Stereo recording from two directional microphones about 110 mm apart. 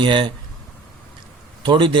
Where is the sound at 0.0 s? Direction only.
45° right (ahead or behind).